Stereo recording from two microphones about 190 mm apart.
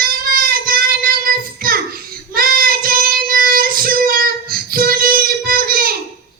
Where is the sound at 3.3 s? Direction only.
50° right (ahead or behind).